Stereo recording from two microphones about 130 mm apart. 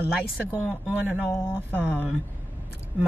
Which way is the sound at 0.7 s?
10° right (ahead or behind).